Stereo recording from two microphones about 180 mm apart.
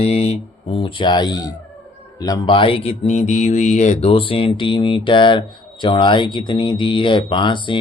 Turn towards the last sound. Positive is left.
turn(degrees=25)  # may be behind; listen again after turning